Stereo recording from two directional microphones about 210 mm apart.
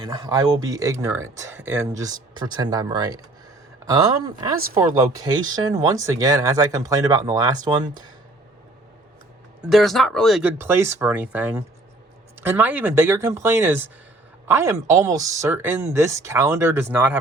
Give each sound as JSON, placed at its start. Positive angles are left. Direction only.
{"t": 0.1, "sound": "speech", "side_deg": -20}
{"t": 9.6, "sound": "speech", "side_deg": 0}